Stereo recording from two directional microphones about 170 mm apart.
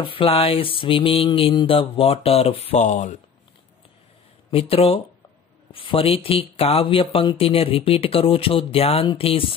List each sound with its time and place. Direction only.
0.0 s speech: 30° left (ahead or behind)
4.5 s speech: 35° left (ahead or behind)